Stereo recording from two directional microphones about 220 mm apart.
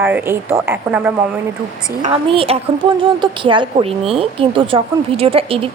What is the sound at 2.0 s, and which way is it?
Speech, 30° right (ahead or behind).